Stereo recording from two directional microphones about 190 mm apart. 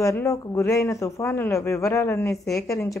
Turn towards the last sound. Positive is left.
turn(degrees=15)  # may be behind; listen again after turning